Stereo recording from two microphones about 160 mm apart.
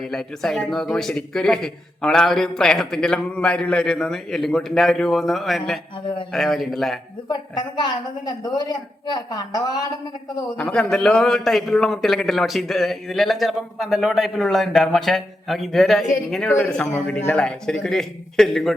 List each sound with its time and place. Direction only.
0.0 s a man's voice: 5° left (ahead or behind)
7.8 s a woman's voice: 25° left (ahead or behind)
10.6 s a man's voice: 5° left (ahead or behind)